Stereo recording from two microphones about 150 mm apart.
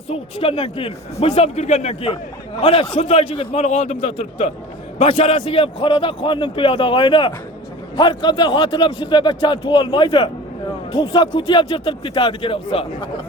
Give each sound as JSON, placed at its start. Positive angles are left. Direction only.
{"t": 0.1, "sound": "a man's voice", "side_deg": 40}